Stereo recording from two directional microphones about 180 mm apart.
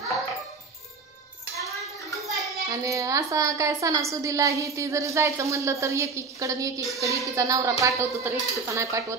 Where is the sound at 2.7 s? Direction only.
15° right (ahead or behind).